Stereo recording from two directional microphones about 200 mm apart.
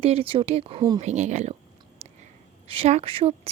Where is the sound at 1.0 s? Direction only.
35° right (ahead or behind).